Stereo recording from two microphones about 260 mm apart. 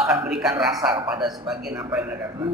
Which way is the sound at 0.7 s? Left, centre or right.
Centre.